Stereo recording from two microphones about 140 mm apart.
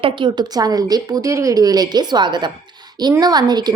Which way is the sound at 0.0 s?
35° right (ahead or behind).